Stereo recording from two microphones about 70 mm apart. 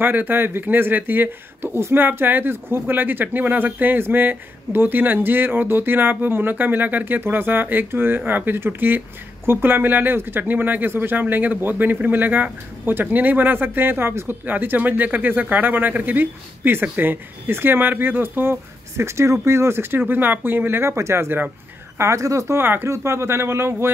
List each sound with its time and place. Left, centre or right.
0.0 s speech: right
22.6 s speech: right